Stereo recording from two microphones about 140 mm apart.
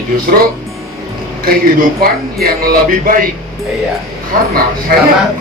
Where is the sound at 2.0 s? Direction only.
90° right.